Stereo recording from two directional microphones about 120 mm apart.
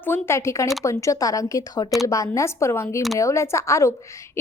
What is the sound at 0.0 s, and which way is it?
A woman's voice, 20° left (ahead or behind).